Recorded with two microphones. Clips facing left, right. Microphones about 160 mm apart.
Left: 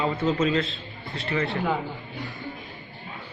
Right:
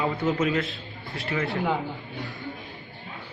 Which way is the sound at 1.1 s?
Centre (ahead or behind).